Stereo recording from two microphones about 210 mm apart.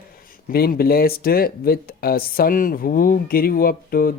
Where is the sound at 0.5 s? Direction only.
45° left (ahead or behind).